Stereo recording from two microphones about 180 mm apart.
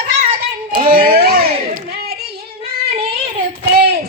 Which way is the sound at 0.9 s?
55° right (ahead or behind).